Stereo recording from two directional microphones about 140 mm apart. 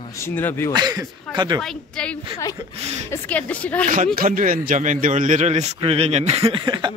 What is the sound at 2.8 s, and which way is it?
Speech, 50° right (ahead or behind).